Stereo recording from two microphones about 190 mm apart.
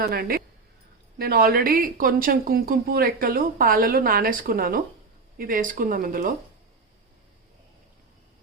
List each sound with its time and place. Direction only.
0.0 s speech: 50° right (ahead or behind)